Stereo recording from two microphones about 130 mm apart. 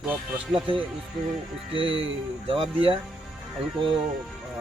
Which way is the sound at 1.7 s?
45° right (ahead or behind).